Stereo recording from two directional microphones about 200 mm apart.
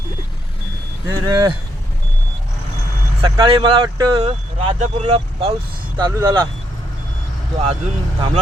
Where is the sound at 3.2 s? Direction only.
25° right (ahead or behind).